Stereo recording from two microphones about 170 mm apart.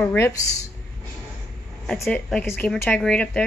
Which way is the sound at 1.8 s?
Centre (ahead or behind).